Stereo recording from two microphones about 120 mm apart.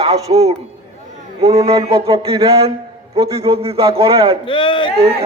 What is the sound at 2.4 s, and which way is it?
A man's voice, 55° right (ahead or behind).